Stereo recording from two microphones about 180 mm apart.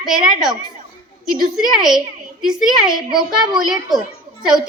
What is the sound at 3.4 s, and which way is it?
Speech, 20° right (ahead or behind).